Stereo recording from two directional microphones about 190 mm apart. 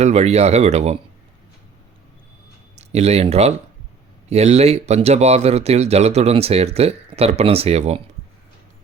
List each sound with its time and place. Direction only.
0.0 s speech: 35° right (ahead or behind)
2.7 s speech: 35° right (ahead or behind)